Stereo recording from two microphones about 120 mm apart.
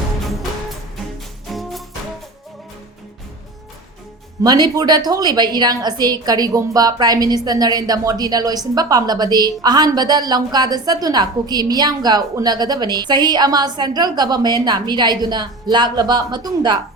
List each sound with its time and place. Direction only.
1.5 s music: centre (ahead or behind)
4.4 s a woman's voice: 35° right (ahead or behind)